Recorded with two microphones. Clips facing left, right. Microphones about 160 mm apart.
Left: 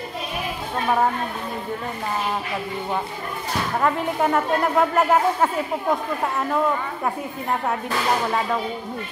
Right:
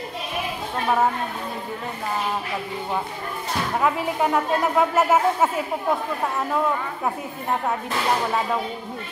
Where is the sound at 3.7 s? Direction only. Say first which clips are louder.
Left 1 dB; 5° right (ahead or behind).